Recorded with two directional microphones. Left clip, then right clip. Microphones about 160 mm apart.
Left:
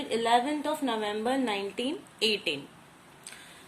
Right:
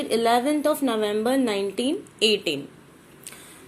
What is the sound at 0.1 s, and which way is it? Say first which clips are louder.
A woman's voice: right 5 dB; 20° right (ahead or behind).